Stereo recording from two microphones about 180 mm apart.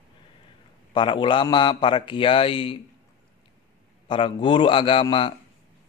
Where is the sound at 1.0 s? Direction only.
25° left (ahead or behind).